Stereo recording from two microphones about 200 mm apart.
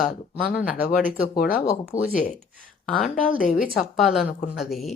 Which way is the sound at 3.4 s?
45° left (ahead or behind).